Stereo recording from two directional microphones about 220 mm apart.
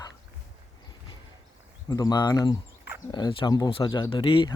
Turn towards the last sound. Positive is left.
turn(degrees=25)  # may be behind; listen again after turning